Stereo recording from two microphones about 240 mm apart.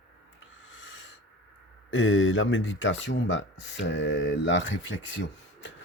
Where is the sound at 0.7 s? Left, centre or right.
Left.